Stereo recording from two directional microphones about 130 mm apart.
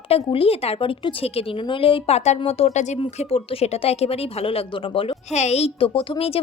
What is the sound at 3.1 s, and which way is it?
A woman's voice, 50° left (ahead or behind).